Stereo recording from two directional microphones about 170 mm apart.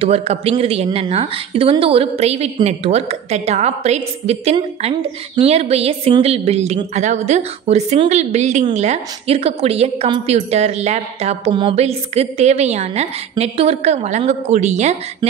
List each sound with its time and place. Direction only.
0.0 s a woman's voice: 35° right (ahead or behind)